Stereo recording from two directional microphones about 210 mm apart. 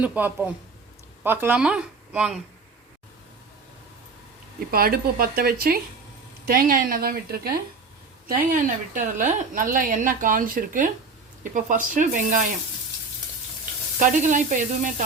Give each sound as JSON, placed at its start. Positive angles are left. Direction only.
{"t": 0.0, "sound": "speech", "side_deg": -5}
{"t": 4.7, "sound": "a woman's voice", "side_deg": -45}
{"t": 9.0, "sound": "speech", "side_deg": -35}
{"t": 14.0, "sound": "speech", "side_deg": -35}